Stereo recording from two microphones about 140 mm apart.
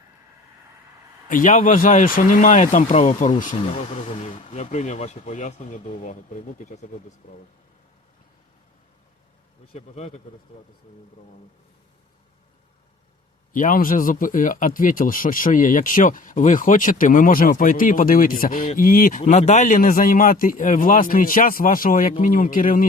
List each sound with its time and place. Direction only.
1.3 s speech: 75° left (ahead or behind)
7.2 s speech: 70° left (ahead or behind)
9.7 s speech: 50° left (ahead or behind)
13.5 s a man's voice: 75° left (ahead or behind)
19.2 s a man's voice: 50° left (ahead or behind); by 22.9 s 80° left